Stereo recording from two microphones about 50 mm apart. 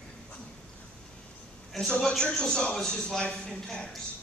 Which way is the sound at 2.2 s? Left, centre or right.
Centre.